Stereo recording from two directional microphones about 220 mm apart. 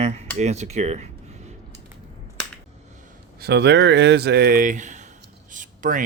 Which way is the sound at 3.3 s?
50° right (ahead or behind).